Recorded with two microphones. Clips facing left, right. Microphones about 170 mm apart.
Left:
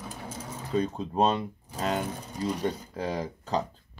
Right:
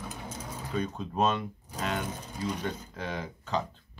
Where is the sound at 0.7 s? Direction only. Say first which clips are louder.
Left 4 dB; 30° left (ahead or behind).